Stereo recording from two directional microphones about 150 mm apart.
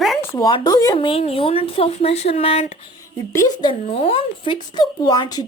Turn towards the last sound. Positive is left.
turn(degrees=25)  # may be behind; listen again after turning